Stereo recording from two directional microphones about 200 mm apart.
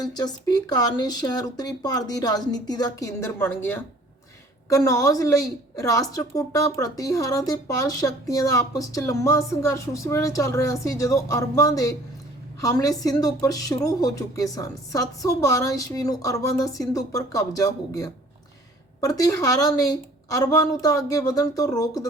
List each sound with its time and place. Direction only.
0.0 s a woman's voice: 20° left (ahead or behind)